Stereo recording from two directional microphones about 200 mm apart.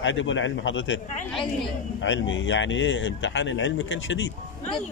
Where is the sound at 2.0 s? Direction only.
70° left (ahead or behind).